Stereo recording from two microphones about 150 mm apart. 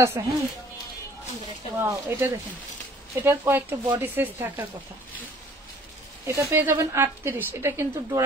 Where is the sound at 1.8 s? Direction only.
15° right (ahead or behind).